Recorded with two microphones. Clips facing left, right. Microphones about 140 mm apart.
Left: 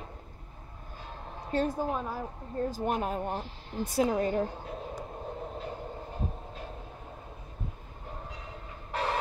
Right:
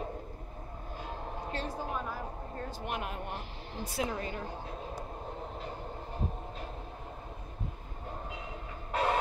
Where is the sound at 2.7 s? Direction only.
40° left (ahead or behind).